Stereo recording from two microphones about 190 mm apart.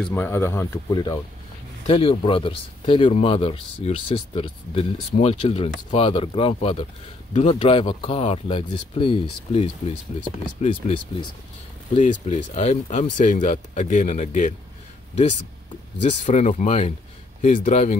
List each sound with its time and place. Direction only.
0.0 s speech: 10° left (ahead or behind)
1.9 s speech: 30° left (ahead or behind)
16.1 s speech: 35° left (ahead or behind)